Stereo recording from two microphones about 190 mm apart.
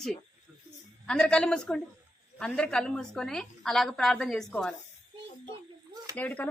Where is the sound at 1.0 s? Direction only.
5° left (ahead or behind).